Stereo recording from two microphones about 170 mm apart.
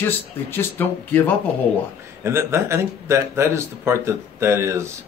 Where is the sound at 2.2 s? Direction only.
15° right (ahead or behind).